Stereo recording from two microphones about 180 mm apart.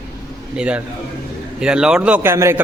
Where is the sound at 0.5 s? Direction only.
5° right (ahead or behind).